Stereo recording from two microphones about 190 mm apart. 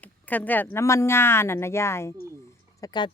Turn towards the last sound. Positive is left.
turn(degrees=20)  # may be behind; listen again after turning